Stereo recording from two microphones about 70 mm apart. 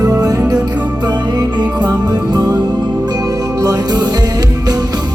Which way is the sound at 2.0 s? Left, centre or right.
Right.